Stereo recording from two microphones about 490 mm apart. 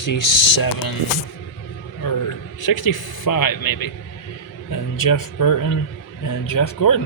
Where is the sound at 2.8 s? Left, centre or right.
Left.